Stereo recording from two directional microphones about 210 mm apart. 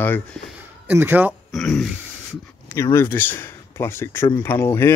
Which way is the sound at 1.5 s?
Centre (ahead or behind).